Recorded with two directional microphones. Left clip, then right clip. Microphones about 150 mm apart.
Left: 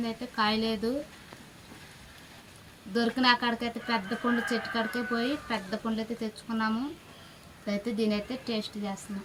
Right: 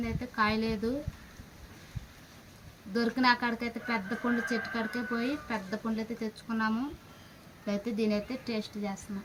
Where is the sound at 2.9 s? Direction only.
10° right (ahead or behind).